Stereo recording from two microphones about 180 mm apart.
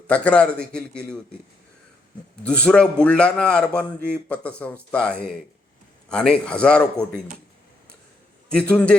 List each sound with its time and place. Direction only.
0.1 s a man's voice: 5° left (ahead or behind)
2.4 s a man's voice: 5° left (ahead or behind)
8.4 s a man's voice: 5° left (ahead or behind)